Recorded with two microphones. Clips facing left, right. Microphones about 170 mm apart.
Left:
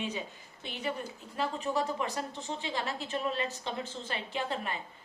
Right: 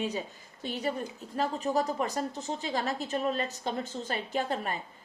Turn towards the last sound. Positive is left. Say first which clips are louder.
# right 3 dB
turn(degrees=-45)  # may be behind; listen again after turning